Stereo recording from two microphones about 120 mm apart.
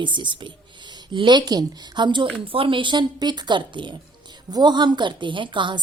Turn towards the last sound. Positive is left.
turn(degrees=-40)  # may be behind; listen again after turning